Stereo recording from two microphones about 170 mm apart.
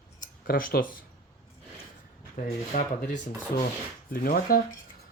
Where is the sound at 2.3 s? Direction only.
45° left (ahead or behind).